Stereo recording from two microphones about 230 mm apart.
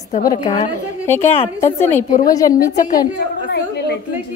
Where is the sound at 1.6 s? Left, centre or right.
Centre.